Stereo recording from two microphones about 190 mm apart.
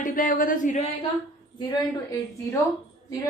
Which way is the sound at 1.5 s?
20° left (ahead or behind).